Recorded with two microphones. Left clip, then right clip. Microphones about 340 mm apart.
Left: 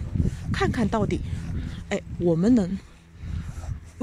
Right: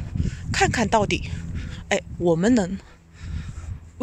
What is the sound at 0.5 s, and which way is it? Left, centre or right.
Speech, right.